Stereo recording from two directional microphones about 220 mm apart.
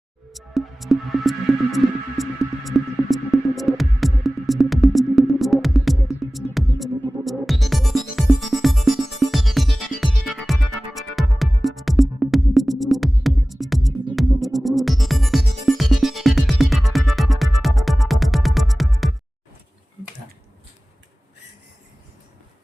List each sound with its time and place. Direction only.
0.3 s music: centre (ahead or behind)